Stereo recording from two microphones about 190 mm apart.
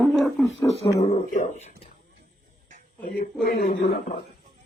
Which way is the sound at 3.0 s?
45° left (ahead or behind).